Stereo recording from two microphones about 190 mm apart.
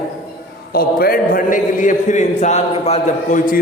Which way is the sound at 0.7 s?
50° left (ahead or behind).